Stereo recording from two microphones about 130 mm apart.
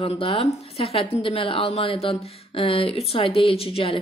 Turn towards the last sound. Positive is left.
turn(degrees=45)  # may be behind; listen again after turning